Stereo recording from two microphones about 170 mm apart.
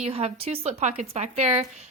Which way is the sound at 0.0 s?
35° right (ahead or behind).